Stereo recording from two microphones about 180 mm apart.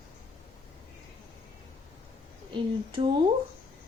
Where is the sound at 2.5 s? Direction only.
30° right (ahead or behind).